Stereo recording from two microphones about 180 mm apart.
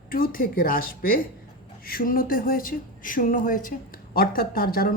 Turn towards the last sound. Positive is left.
turn(degrees=55)  # may be behind; listen again after turning